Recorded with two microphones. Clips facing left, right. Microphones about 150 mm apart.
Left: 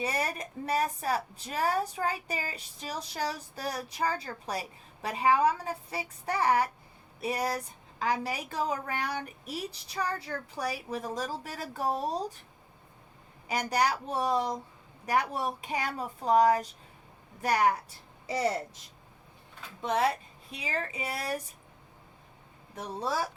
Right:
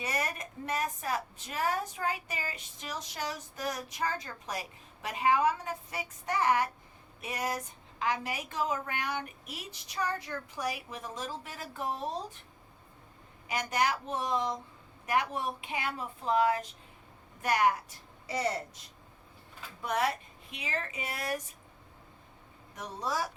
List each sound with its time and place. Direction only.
0.0 s a woman's voice: 30° left (ahead or behind)
13.5 s a woman's voice: 35° left (ahead or behind)
19.8 s a woman's voice: 30° left (ahead or behind)
22.7 s a woman's voice: 30° left (ahead or behind)